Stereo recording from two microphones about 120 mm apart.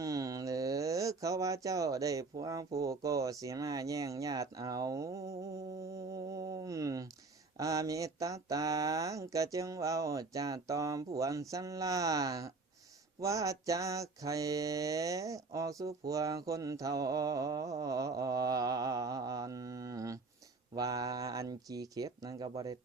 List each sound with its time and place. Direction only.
0.0 s speech: 25° right (ahead or behind)
7.6 s mantra: 25° right (ahead or behind)
20.7 s speech: 30° right (ahead or behind)